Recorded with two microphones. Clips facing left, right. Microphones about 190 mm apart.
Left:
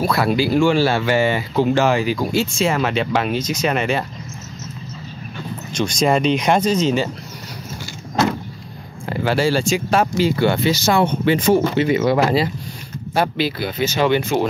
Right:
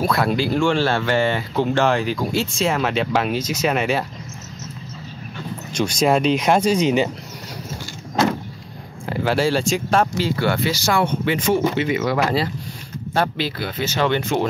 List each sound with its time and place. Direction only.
0.0 s speech: 5° left (ahead or behind)
5.7 s speech: 10° right (ahead or behind)
9.1 s speech: centre (ahead or behind); by 12.4 s 25° left (ahead or behind)
13.1 s speech: 10° left (ahead or behind)